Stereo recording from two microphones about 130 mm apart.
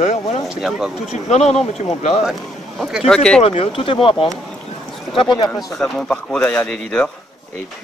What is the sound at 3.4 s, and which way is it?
Speech, 50° left (ahead or behind).